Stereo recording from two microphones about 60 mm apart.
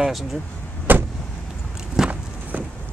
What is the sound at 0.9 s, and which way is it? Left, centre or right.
Vehicle, right.